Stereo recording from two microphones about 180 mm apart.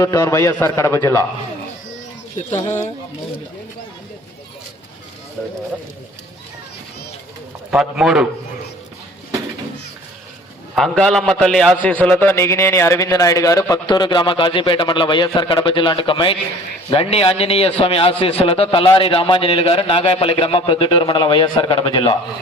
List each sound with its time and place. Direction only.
0.0 s a man's voice: 15° left (ahead or behind)
7.7 s a man's voice: 5° right (ahead or behind)
10.8 s a man's voice: centre (ahead or behind); by 22.2 s 30° left (ahead or behind)